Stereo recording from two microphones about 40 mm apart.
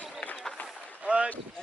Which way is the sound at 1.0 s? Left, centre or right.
Right.